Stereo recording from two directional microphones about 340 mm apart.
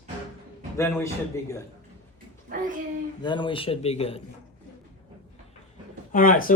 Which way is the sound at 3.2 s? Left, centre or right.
Centre.